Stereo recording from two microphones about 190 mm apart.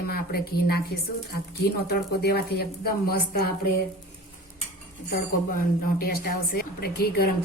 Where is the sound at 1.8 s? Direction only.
55° left (ahead or behind).